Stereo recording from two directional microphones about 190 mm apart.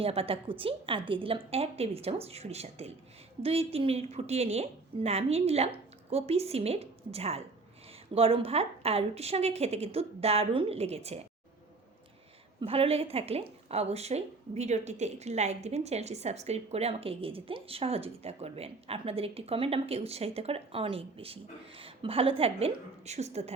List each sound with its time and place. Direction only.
0.0 s a woman's voice: 30° right (ahead or behind)
12.5 s a woman's voice: 30° right (ahead or behind)